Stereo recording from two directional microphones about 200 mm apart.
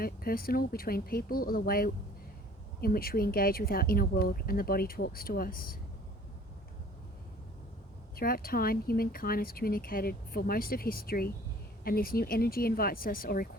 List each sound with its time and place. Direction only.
0.0 s speech: 45° left (ahead or behind)
8.1 s speech: 50° left (ahead or behind)